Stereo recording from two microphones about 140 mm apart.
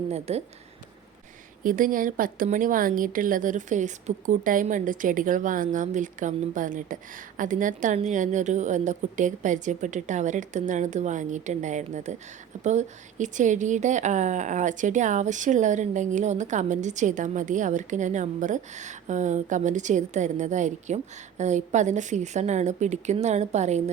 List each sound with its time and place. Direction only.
0.1 s a woman's voice: 50° right (ahead or behind)
1.6 s a woman's voice: 75° right (ahead or behind); by 23.9 s 55° right (ahead or behind)